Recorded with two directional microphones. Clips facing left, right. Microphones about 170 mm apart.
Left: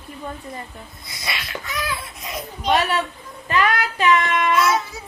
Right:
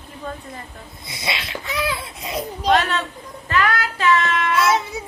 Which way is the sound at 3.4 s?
15° left (ahead or behind).